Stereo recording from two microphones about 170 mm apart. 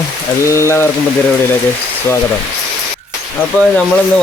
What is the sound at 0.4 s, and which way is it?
Frying, 15° left (ahead or behind).